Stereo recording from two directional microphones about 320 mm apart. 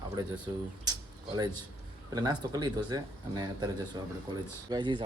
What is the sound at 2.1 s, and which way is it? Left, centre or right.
Speech, centre.